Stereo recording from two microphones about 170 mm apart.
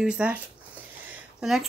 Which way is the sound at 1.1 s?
Centre (ahead or behind).